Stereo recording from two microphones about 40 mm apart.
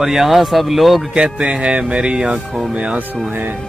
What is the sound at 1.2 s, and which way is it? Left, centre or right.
Speech, right.